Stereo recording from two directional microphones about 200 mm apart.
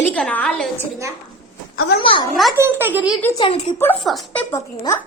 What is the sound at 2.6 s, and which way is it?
Speech, 10° right (ahead or behind).